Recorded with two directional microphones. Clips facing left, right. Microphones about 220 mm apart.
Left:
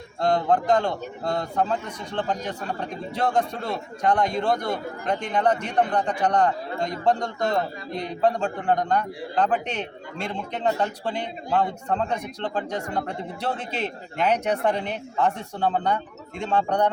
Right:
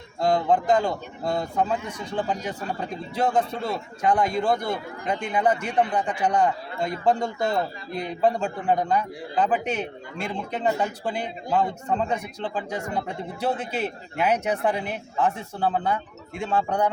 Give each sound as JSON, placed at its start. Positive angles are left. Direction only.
{"t": 0.2, "sound": "a man's voice", "side_deg": -5}